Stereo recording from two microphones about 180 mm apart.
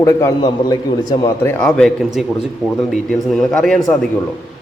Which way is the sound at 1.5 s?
5° left (ahead or behind).